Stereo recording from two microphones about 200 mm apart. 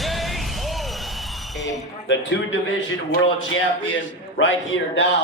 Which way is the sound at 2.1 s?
65° left (ahead or behind).